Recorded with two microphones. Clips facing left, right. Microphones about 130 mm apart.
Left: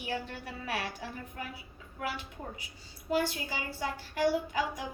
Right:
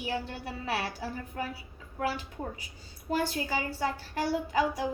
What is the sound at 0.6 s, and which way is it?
A woman's voice, 35° right (ahead or behind).